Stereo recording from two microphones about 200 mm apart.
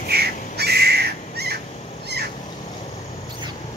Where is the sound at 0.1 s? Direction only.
55° right (ahead or behind).